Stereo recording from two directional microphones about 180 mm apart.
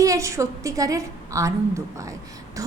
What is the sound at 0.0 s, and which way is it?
A woman's voice, 15° right (ahead or behind).